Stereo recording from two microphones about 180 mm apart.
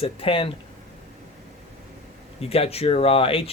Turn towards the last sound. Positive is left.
turn(degrees=30)  # may be behind; listen again after turning